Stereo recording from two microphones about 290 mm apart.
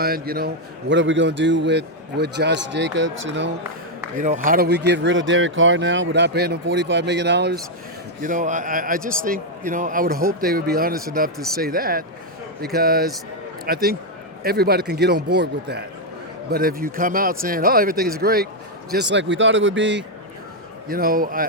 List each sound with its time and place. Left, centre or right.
0.0 s a man's voice: right